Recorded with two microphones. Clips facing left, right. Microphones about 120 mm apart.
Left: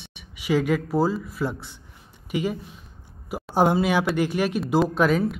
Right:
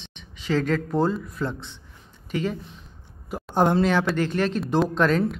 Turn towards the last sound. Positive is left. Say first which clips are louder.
# even
turn(degrees=5)  # may be behind; listen again after turning